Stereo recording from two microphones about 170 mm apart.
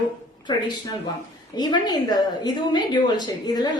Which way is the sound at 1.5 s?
25° left (ahead or behind).